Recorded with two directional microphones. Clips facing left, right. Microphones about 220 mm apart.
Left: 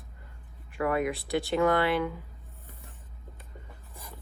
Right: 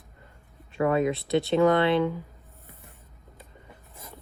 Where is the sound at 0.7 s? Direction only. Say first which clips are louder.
Right 4 dB; 25° right (ahead or behind).